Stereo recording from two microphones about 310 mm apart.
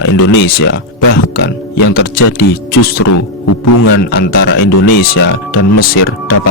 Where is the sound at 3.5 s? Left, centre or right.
Left.